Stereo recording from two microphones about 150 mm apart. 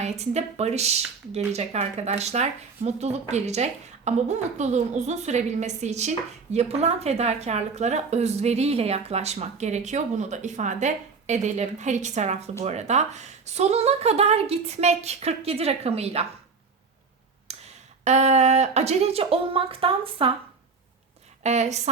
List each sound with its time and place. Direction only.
0.0 s speech: 45° right (ahead or behind)
17.5 s speech: 45° right (ahead or behind)
21.4 s speech: 50° right (ahead or behind)